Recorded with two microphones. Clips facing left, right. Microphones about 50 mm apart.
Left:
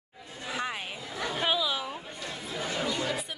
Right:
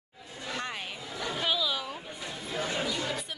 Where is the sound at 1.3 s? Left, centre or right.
Centre.